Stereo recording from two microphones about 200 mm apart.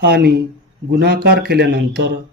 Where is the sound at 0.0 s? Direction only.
55° right (ahead or behind).